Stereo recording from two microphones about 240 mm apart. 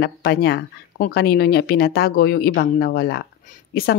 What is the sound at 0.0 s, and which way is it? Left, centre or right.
A woman's voice, left.